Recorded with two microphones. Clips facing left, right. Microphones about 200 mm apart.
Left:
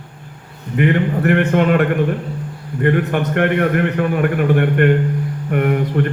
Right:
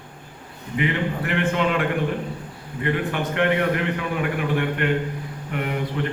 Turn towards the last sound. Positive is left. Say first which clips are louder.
# left 9 dB
turn(degrees=55)  # may be behind; listen again after turning